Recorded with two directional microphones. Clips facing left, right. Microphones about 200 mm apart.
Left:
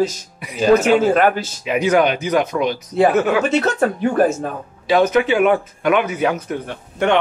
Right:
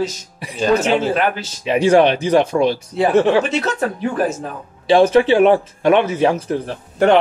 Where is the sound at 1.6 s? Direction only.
30° right (ahead or behind).